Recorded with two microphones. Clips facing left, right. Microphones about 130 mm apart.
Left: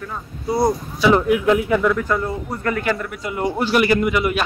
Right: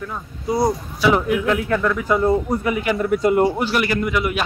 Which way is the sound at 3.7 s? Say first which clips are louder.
Left 3 dB; 15° left (ahead or behind).